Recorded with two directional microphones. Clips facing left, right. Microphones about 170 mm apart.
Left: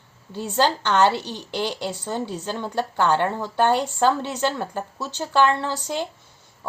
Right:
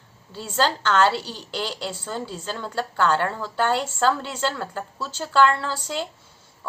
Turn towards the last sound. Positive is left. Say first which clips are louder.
# left 2 dB
turn(degrees=20)  # may be behind; listen again after turning